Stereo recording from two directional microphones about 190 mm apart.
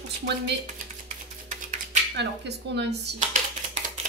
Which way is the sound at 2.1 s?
60° right (ahead or behind).